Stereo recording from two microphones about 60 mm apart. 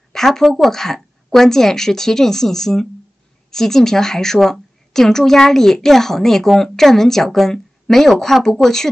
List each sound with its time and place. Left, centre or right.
0.1 s a woman's voice: centre